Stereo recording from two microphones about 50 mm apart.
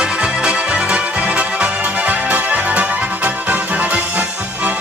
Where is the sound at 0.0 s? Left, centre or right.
Centre.